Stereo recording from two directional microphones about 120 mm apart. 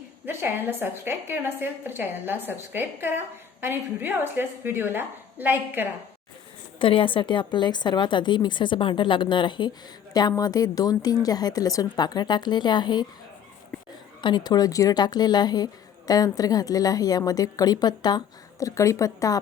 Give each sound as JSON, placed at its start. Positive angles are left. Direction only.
{"t": 0.3, "sound": "a woman's voice", "side_deg": -20}
{"t": 6.7, "sound": "speech", "side_deg": 45}
{"t": 14.2, "sound": "speech", "side_deg": 40}